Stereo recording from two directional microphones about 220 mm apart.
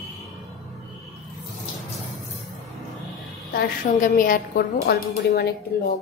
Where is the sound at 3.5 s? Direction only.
40° left (ahead or behind).